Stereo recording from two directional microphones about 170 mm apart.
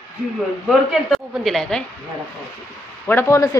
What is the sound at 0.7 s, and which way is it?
A woman's voice, centre (ahead or behind).